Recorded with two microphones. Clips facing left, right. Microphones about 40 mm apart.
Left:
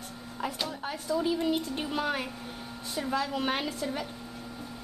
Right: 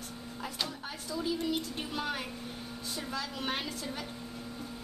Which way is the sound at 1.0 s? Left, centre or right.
Left.